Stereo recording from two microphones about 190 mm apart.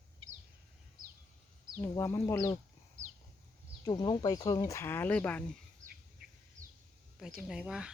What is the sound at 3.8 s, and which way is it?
Speech, 20° left (ahead or behind).